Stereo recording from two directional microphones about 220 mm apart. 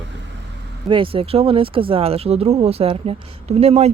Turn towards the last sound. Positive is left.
turn(degrees=-30)  # may be behind; listen again after turning